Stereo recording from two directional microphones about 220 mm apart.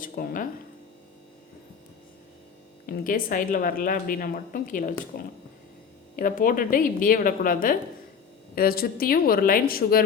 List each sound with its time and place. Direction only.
0.0 s speech: 40° left (ahead or behind)
2.8 s speech: 40° left (ahead or behind)
6.1 s speech: 40° left (ahead or behind)